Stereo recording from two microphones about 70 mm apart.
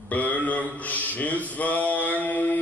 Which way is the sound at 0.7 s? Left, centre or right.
Left.